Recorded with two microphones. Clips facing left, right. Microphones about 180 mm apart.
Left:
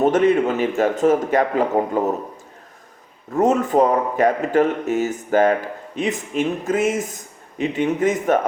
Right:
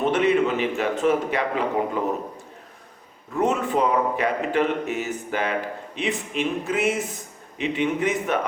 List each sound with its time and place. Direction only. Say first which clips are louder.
0.0 s a man's voice: left 4 dB; 45° left (ahead or behind)
3.3 s a man's voice: left 6 dB; 45° left (ahead or behind)